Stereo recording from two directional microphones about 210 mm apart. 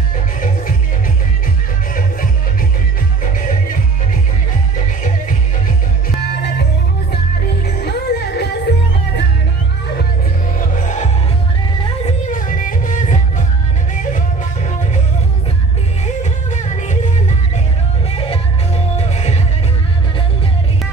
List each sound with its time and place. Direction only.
3.3 s music: 40° left (ahead or behind)
7.6 s music: 50° left (ahead or behind)
10.6 s music: 35° left (ahead or behind)
16.2 s music: 35° left (ahead or behind)
18.1 s music: 25° left (ahead or behind)